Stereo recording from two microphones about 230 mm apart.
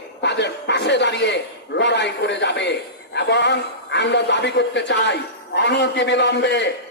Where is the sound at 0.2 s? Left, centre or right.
Left.